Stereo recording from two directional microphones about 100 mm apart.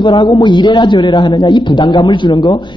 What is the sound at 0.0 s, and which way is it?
A man's voice, 50° left (ahead or behind).